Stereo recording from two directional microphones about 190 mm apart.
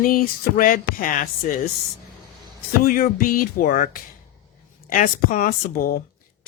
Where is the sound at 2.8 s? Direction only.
50° left (ahead or behind).